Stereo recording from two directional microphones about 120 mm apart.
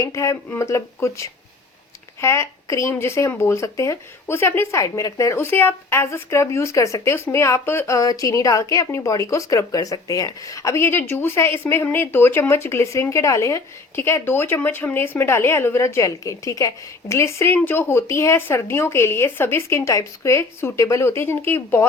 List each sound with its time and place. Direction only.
0.0 s speech: 25° left (ahead or behind)